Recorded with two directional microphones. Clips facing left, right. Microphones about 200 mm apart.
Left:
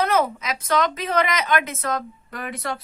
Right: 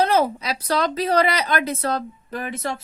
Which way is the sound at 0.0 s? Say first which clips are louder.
Right 2 dB; 30° right (ahead or behind).